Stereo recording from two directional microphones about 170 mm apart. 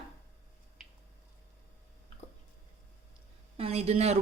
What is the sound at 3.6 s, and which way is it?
Speech, 40° right (ahead or behind).